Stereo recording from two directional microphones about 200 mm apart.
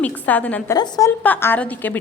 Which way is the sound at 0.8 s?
20° left (ahead or behind).